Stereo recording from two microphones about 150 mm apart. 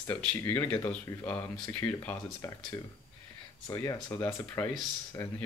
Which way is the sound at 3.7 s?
20° left (ahead or behind).